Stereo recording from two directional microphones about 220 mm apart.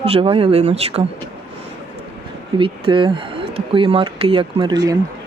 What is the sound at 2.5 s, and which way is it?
Speech, 25° right (ahead or behind).